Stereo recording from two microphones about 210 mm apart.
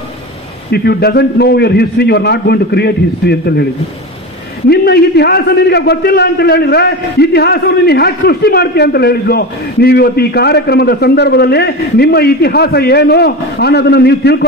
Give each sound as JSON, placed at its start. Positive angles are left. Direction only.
{"t": 0.7, "sound": "a man's voice", "side_deg": 50}
{"t": 4.6, "sound": "a man's voice", "side_deg": 50}